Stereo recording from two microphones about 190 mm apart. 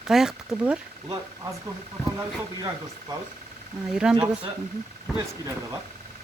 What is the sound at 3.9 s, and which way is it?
Speech, 5° right (ahead or behind).